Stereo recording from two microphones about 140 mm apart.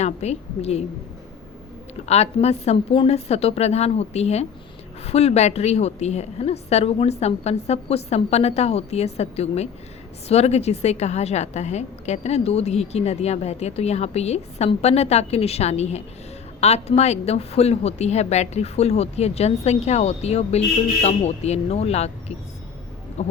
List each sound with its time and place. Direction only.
0.0 s a woman's voice: 50° left (ahead or behind)
2.0 s a woman's voice: 50° left (ahead or behind)